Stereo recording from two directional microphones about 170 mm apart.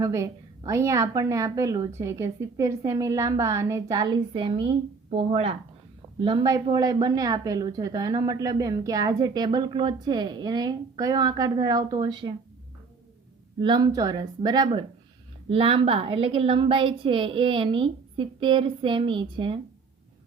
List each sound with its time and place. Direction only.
0.0 s a woman's voice: 20° right (ahead or behind)
13.6 s a woman's voice: 25° right (ahead or behind)